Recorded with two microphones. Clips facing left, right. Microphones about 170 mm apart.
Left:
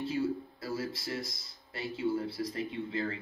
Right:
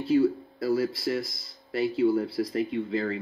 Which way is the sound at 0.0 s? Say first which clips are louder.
Right 9 dB; 70° right (ahead or behind).